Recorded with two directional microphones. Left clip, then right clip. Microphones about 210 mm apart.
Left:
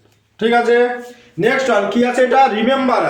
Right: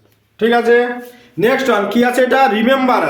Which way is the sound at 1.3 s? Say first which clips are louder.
Right 1 dB; 55° right (ahead or behind).